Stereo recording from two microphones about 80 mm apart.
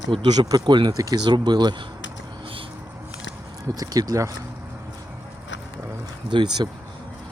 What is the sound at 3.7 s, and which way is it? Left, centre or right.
Speech, right.